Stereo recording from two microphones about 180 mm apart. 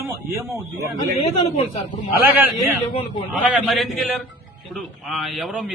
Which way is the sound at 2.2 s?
10° right (ahead or behind).